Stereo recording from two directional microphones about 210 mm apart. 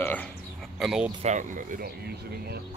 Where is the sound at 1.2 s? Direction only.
35° right (ahead or behind).